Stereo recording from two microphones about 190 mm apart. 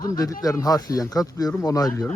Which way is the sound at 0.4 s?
20° left (ahead or behind).